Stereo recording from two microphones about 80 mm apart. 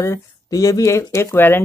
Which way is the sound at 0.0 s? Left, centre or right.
Left.